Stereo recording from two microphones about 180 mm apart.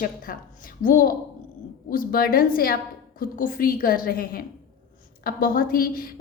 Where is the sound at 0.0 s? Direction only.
50° left (ahead or behind).